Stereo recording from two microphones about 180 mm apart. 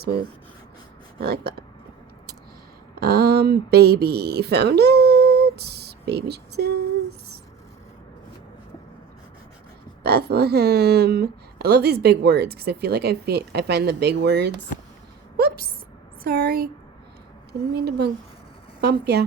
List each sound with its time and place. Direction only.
1.2 s speech: 60° right (ahead or behind)
2.9 s speech: 60° right (ahead or behind)
10.0 s speech: 60° right (ahead or behind)
16.2 s speech: 55° right (ahead or behind)
17.7 s speech: 65° right (ahead or behind)